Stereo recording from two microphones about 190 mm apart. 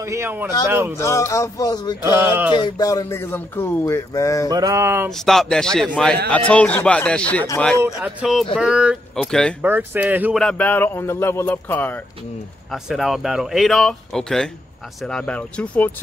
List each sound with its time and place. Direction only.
0.0 s speech: 15° right (ahead or behind)
0.9 s speech: 15° left (ahead or behind)
2.0 s speech: 10° right (ahead or behind)
2.5 s speech: 20° left (ahead or behind)
4.5 s speech: 20° right (ahead or behind)
5.1 s speech: centre (ahead or behind)
7.8 s speech: 5° right (ahead or behind)
9.6 s speech: 10° right (ahead or behind)
10.4 s speech: 10° left (ahead or behind)
12.7 s speech: centre (ahead or behind)